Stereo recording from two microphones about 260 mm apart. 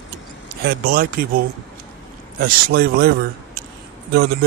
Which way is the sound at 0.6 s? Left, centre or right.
Right.